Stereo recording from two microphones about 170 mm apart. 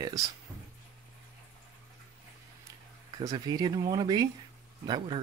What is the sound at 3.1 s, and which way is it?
Speech, 25° right (ahead or behind).